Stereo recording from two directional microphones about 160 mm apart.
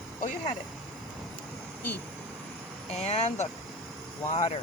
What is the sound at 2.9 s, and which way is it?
Speech, 45° left (ahead or behind).